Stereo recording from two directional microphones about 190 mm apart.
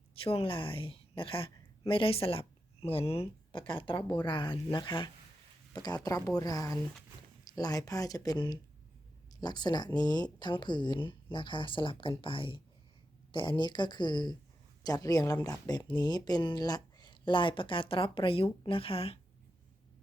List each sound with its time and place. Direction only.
0.1 s a woman's voice: 30° left (ahead or behind)